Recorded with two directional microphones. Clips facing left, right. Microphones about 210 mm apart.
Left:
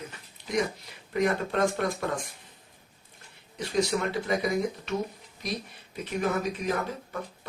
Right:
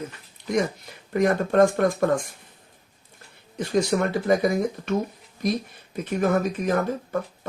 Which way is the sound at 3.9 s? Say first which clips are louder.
Right 6 dB; 50° right (ahead or behind).